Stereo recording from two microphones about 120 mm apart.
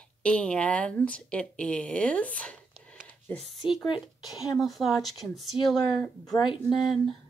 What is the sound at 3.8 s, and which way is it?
Speech, 35° left (ahead or behind).